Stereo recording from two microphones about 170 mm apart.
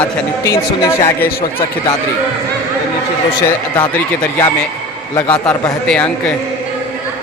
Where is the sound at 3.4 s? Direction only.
15° left (ahead or behind).